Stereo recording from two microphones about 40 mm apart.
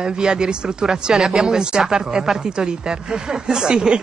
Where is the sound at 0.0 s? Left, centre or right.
Centre.